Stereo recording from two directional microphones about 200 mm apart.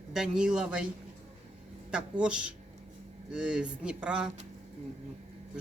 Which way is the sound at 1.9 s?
5° right (ahead or behind).